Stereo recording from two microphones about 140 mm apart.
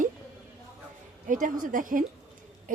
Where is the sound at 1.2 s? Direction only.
70° right (ahead or behind).